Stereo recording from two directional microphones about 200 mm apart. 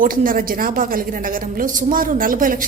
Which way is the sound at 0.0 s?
45° right (ahead or behind).